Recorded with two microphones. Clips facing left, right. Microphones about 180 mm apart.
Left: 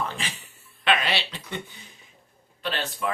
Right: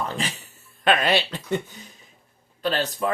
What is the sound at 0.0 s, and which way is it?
Speech, 40° right (ahead or behind).